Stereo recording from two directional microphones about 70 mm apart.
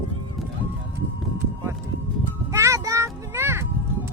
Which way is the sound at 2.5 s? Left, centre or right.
Right.